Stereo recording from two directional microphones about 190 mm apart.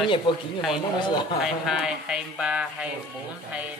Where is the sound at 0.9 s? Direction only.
25° left (ahead or behind).